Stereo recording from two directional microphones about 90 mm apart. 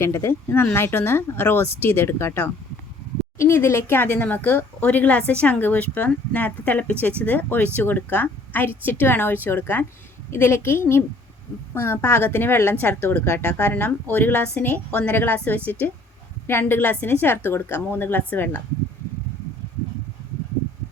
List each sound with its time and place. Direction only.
0.0 s speech: 30° left (ahead or behind)